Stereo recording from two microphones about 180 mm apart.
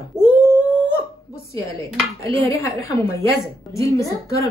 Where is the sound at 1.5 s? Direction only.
15° left (ahead or behind).